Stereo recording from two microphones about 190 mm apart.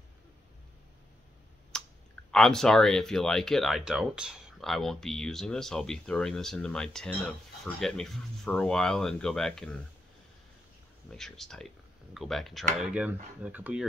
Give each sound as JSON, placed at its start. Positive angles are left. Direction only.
{"t": 1.7, "sound": "clicking", "side_deg": 5}
{"t": 2.3, "sound": "speech", "side_deg": 0}
{"t": 11.1, "sound": "speech", "side_deg": 5}